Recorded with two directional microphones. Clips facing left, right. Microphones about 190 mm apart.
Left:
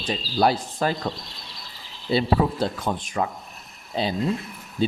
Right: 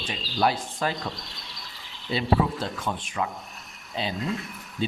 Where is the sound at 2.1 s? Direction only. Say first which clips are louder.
Left 3 dB; 35° left (ahead or behind).